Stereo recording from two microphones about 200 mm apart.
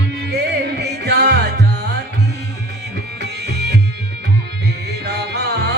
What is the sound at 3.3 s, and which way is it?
Tabla, 55° right (ahead or behind).